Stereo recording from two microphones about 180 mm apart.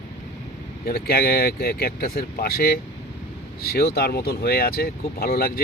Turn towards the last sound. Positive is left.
turn(degrees=55)  # may be behind; listen again after turning